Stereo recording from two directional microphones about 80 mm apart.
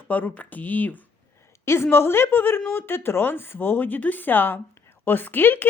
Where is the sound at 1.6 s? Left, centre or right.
Left.